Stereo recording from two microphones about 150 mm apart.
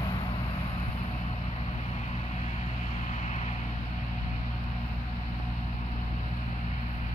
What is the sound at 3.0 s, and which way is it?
Vehicle, 50° left (ahead or behind).